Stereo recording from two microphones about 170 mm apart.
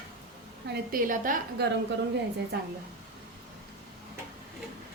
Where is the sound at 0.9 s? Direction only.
50° right (ahead or behind).